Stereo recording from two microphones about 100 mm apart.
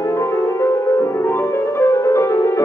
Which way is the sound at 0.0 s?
30° left (ahead or behind).